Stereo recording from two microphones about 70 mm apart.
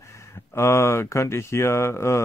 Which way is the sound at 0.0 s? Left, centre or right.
Left.